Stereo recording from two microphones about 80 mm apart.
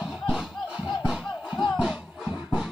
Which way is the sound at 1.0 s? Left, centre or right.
Centre.